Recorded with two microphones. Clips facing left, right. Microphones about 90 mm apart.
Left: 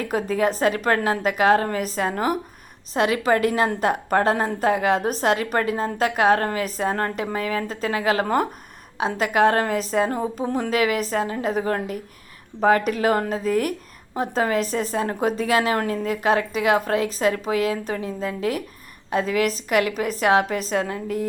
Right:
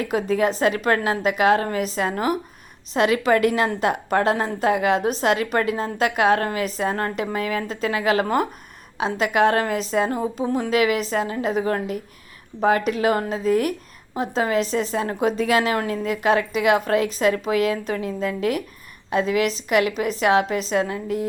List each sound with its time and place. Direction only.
0.0 s a woman's voice: 45° left (ahead or behind)